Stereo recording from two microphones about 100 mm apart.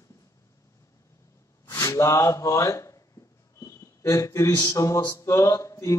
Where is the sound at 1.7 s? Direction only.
30° left (ahead or behind).